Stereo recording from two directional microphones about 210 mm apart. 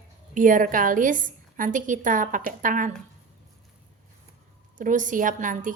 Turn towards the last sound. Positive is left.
turn(degrees=-35)  # may be behind; listen again after turning